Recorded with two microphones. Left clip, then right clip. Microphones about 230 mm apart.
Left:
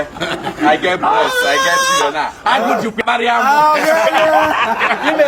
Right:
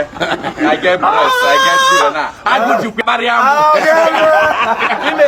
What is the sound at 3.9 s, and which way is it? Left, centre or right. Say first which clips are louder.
Speech: right 2 dB; right.